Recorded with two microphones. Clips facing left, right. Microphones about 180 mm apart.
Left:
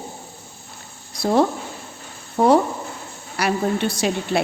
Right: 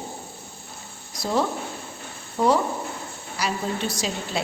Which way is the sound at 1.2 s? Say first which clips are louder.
Left 6 dB; 60° left (ahead or behind).